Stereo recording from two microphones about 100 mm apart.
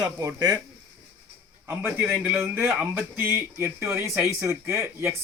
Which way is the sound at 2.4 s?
25° right (ahead or behind).